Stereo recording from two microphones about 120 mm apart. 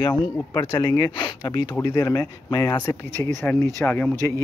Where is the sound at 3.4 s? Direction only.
20° left (ahead or behind).